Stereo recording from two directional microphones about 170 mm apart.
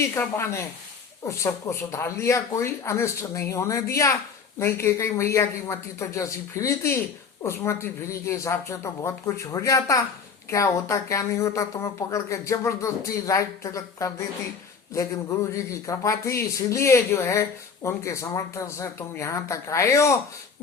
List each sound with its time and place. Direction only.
0.1 s speech: 15° left (ahead or behind)
15.5 s speech: 20° left (ahead or behind)